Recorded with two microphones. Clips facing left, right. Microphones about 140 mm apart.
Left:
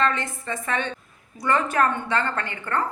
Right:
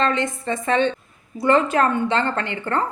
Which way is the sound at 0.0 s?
25° right (ahead or behind).